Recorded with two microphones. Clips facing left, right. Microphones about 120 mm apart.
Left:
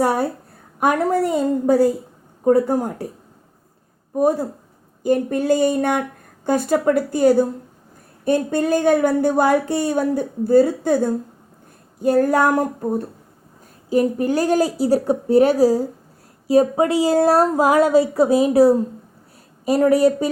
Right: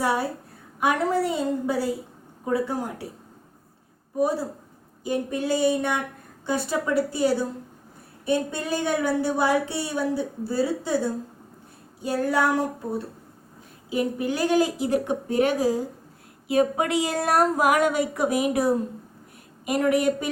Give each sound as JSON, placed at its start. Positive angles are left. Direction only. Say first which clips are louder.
{"t": 0.0, "sound": "a sound", "louder": "left 6 dB", "side_deg": 45}
{"t": 0.8, "sound": "speech", "louder": "left 5 dB", "side_deg": 45}
{"t": 4.2, "sound": "a woman's voice", "louder": "left 6 dB", "side_deg": 45}